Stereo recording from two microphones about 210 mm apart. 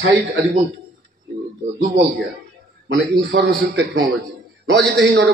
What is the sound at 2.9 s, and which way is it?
A man's voice, 55° right (ahead or behind).